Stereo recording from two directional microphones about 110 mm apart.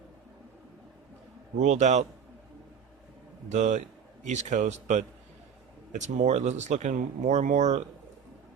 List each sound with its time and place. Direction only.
1.5 s speech: 90° right
3.5 s speech: 90° right